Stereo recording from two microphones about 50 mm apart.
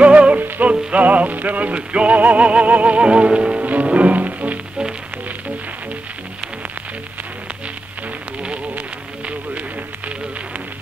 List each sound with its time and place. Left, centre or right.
0.0 s music: right
8.4 s insect: right